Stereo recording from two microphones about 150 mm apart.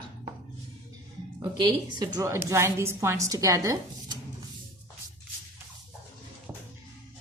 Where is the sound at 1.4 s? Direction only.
30° right (ahead or behind).